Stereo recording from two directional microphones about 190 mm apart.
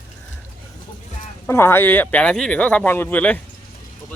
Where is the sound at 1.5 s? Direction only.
15° left (ahead or behind).